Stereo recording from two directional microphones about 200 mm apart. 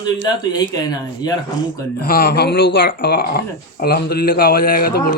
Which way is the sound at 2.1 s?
50° left (ahead or behind).